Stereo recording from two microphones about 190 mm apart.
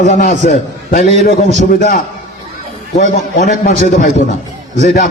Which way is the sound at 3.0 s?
40° left (ahead or behind).